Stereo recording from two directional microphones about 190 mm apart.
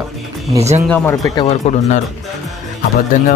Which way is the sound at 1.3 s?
35° left (ahead or behind).